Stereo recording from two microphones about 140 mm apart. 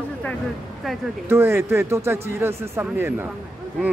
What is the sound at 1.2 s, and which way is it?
Speech, 15° right (ahead or behind).